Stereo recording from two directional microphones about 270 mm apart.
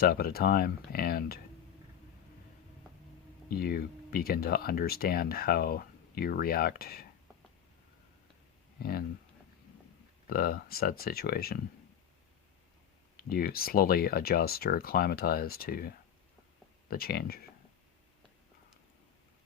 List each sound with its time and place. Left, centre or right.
0.0 s speech: left
3.5 s speech: left
8.8 s speech: left
10.2 s speech: left
13.2 s speech: left
16.9 s speech: left